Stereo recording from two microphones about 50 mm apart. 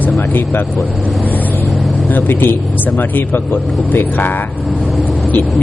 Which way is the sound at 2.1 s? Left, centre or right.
Left.